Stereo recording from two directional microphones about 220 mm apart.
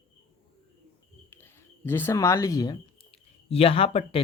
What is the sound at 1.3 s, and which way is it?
Speech, 10° left (ahead or behind).